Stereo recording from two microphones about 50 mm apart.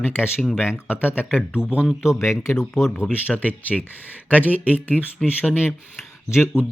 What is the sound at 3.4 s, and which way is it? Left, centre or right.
Speech, left.